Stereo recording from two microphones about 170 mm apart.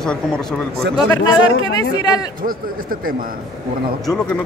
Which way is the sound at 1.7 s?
25° left (ahead or behind).